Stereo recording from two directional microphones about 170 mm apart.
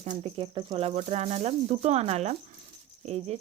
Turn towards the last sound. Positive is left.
turn(degrees=-40)  # may be behind; listen again after turning